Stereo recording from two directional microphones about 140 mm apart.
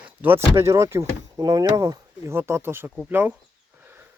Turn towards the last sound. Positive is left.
turn(degrees=-15)  # may be behind; listen again after turning